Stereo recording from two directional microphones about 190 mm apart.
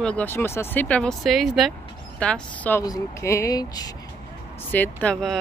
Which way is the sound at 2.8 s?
15° left (ahead or behind).